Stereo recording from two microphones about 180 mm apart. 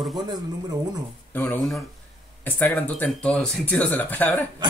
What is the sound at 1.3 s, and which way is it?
Speech, 10° left (ahead or behind).